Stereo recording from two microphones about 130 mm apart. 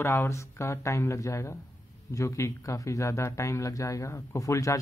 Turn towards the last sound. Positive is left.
turn(degrees=25)  # may be behind; listen again after turning